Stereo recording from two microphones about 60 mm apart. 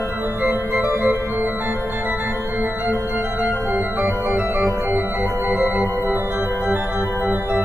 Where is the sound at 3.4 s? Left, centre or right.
Right.